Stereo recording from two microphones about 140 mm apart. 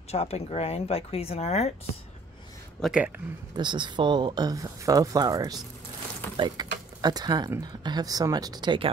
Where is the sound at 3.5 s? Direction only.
35° right (ahead or behind).